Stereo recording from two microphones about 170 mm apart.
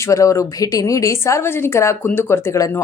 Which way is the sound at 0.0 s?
20° left (ahead or behind).